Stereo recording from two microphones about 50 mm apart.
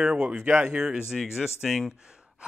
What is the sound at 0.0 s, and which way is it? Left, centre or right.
Speech, centre.